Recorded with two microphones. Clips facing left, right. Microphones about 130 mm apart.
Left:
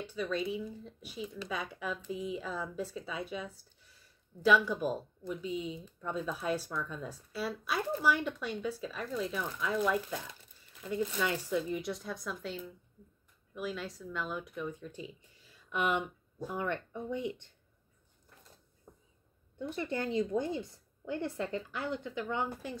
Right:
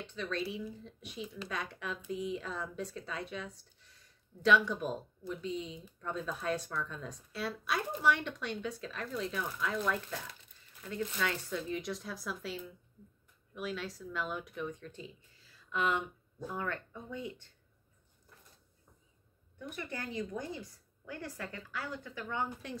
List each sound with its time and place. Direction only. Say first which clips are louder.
0.0 s a woman's voice: left 3 dB; 5° left (ahead or behind); by 17.3 s 20° left (ahead or behind)
18.9 s a sound: left 10 dB; 50° left (ahead or behind)
19.6 s a woman's voice: left 7 dB; 25° left (ahead or behind)